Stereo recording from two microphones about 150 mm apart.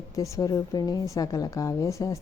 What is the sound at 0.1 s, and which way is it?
A woman's voice, 20° left (ahead or behind).